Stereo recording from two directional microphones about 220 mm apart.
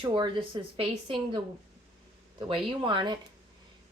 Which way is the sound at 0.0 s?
25° right (ahead or behind).